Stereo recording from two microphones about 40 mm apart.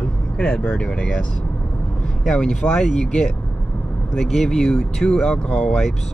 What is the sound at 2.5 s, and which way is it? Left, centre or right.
Speech, left.